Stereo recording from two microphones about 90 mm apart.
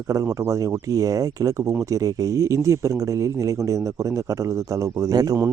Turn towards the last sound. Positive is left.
turn(degrees=-45)  # may be behind; listen again after turning